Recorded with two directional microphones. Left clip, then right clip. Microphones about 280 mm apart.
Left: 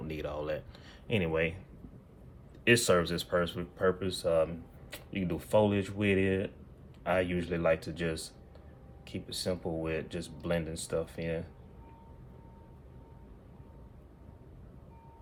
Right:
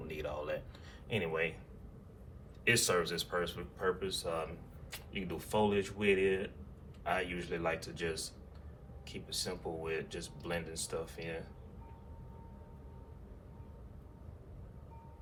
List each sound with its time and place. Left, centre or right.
0.1 s a sound: left
1.0 s speech: left
2.6 s speech: left